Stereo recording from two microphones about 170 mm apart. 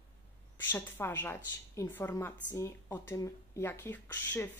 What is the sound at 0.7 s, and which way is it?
A woman's voice, 10° left (ahead or behind).